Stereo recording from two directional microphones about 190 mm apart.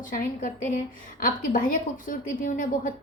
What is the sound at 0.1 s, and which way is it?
A woman's voice, 45° left (ahead or behind).